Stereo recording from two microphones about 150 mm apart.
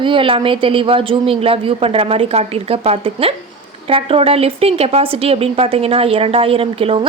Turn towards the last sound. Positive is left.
turn(degrees=-40)  # may be behind; listen again after turning